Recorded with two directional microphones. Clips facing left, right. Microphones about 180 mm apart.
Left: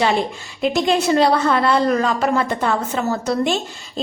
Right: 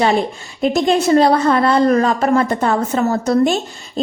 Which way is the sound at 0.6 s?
45° right (ahead or behind).